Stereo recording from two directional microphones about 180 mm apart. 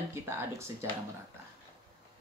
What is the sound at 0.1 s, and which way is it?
Speech, 15° right (ahead or behind).